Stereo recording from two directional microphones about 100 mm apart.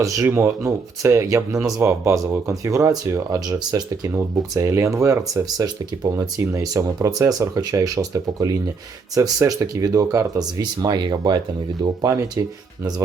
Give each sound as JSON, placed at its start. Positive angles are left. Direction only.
{"t": 0.0, "sound": "speech", "side_deg": -30}
{"t": 3.6, "sound": "speech", "side_deg": -40}
{"t": 12.0, "sound": "speech", "side_deg": -35}